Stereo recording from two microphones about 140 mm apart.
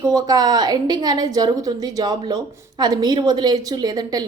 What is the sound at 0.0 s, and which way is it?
A woman's voice, 25° right (ahead or behind).